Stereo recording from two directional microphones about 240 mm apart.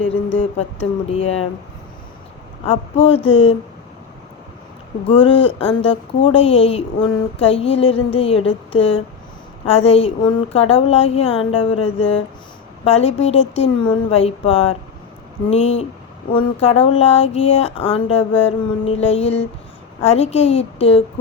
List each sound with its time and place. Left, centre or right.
0.3 s a woman's voice: left
2.6 s a woman's voice: left
5.0 s a woman's voice: left